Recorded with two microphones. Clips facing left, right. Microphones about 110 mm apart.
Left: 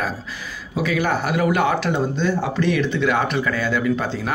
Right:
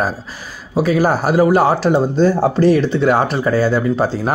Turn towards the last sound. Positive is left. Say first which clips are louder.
# right 5 dB
turn(degrees=-40)  # may be behind; listen again after turning